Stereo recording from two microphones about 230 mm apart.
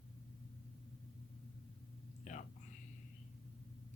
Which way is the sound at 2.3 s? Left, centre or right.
Left.